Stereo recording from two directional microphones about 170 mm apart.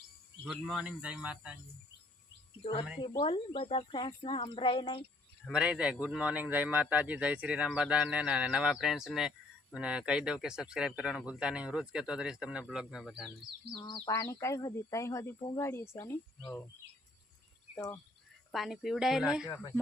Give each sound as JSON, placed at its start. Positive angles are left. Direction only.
{"t": 0.4, "sound": "a man's voice", "side_deg": 0}
{"t": 3.0, "sound": "speech", "side_deg": 30}
{"t": 5.5, "sound": "a man's voice", "side_deg": -5}
{"t": 13.7, "sound": "speech", "side_deg": 25}
{"t": 17.7, "sound": "speech", "side_deg": 15}
{"t": 18.5, "sound": "a man's voice", "side_deg": 0}